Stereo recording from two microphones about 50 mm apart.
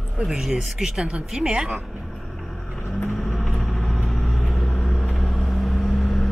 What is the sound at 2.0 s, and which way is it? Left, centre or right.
Vehicle, centre.